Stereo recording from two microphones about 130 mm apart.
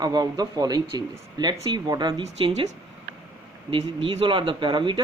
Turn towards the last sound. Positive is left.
turn(degrees=-35)  # may be behind; listen again after turning